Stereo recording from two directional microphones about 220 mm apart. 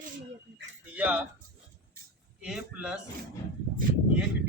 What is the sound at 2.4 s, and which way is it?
Speech, 5° right (ahead or behind).